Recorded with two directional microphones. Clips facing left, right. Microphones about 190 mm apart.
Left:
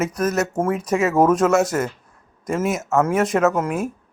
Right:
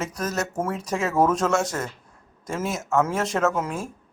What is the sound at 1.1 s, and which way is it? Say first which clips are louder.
Speech: left 4 dB; 20° left (ahead or behind).